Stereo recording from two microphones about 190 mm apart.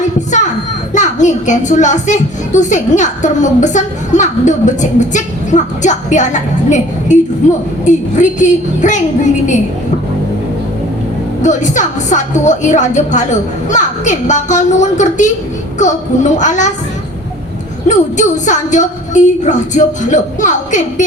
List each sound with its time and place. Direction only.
0.3 s children playing: 40° left (ahead or behind)
0.9 s a child's voice: 40° left (ahead or behind)
11.4 s a child's voice: 40° left (ahead or behind)
17.8 s a child's voice: 40° left (ahead or behind)